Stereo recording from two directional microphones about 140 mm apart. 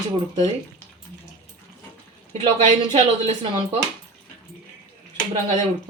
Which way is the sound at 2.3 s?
50° right (ahead or behind).